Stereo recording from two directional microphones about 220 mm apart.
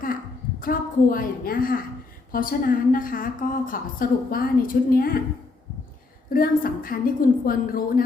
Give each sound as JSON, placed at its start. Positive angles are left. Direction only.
{"t": 0.6, "sound": "a woman's voice", "side_deg": 40}
{"t": 6.3, "sound": "a woman's voice", "side_deg": 40}